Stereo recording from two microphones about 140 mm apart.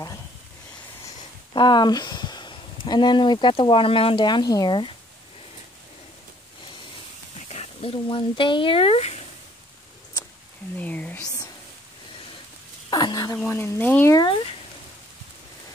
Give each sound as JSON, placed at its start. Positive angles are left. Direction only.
{"t": 1.5, "sound": "speech", "side_deg": 35}
{"t": 7.5, "sound": "speech", "side_deg": 45}
{"t": 10.1, "sound": "a sound", "side_deg": 25}
{"t": 10.8, "sound": "speech", "side_deg": 10}
{"t": 12.9, "sound": "a sound", "side_deg": 30}
{"t": 13.5, "sound": "speech", "side_deg": 15}
{"t": 14.1, "sound": "speech", "side_deg": 35}